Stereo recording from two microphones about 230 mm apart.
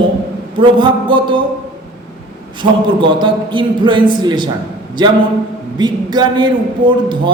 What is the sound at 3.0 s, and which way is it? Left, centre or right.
A man's voice, right.